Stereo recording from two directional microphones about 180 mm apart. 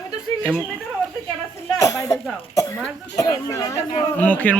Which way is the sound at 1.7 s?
20° left (ahead or behind).